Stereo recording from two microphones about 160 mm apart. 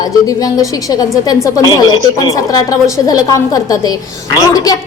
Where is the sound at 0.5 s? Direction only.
25° left (ahead or behind).